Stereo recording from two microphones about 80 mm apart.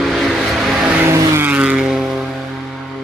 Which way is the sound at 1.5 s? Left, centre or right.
Centre.